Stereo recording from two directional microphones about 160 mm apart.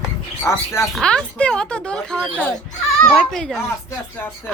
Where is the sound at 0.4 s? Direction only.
15° left (ahead or behind).